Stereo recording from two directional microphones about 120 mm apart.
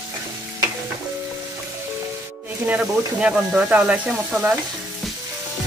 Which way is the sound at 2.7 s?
10° right (ahead or behind).